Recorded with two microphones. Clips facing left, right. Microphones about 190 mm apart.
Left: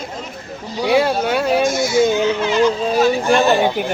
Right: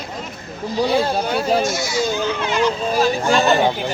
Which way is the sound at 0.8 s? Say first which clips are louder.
Left 4 dB; 70° left (ahead or behind).